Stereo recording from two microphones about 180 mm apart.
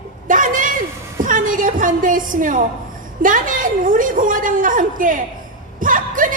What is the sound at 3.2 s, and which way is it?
A woman's voice, 45° right (ahead or behind).